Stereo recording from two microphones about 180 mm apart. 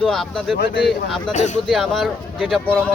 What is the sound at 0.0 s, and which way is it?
Speech, centre (ahead or behind).